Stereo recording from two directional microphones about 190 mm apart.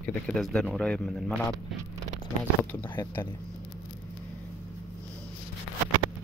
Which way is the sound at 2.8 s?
25° left (ahead or behind).